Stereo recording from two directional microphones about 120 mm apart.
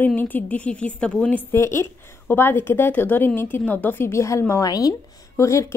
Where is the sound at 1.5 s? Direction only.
20° left (ahead or behind).